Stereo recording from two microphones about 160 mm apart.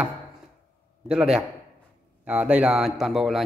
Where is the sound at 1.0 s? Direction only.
5° right (ahead or behind).